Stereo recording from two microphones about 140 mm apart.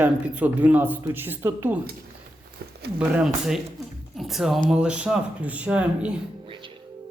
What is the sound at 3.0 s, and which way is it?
A man's voice, 5° right (ahead or behind).